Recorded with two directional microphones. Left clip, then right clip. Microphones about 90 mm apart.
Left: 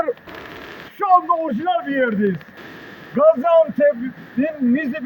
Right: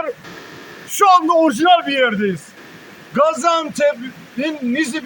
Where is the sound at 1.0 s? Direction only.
50° right (ahead or behind).